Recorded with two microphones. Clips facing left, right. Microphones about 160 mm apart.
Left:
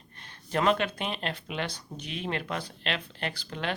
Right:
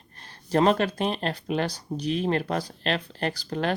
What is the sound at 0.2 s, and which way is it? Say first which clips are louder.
Speech: right 7 dB; 35° right (ahead or behind).